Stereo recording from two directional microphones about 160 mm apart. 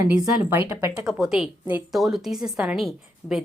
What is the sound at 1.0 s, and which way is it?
A woman's voice, 5° right (ahead or behind).